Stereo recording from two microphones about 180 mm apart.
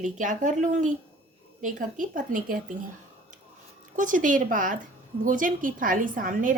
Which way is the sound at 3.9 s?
45° right (ahead or behind).